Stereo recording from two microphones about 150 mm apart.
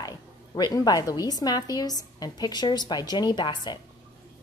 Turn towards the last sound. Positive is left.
turn(degrees=30)  # may be behind; listen again after turning